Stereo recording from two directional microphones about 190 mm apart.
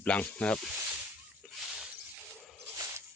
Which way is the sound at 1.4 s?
5° right (ahead or behind).